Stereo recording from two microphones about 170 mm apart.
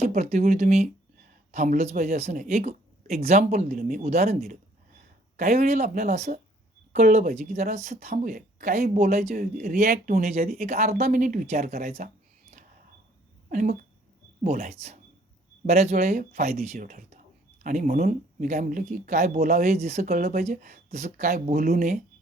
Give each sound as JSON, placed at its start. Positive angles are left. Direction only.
{"t": 0.0, "sound": "speech", "side_deg": -40}
{"t": 7.3, "sound": "speech", "side_deg": -55}
{"t": 10.7, "sound": "speech", "side_deg": -40}
{"t": 13.5, "sound": "speech", "side_deg": -50}
{"t": 16.7, "sound": "speech", "side_deg": -55}
{"t": 19.7, "sound": "speech", "side_deg": -40}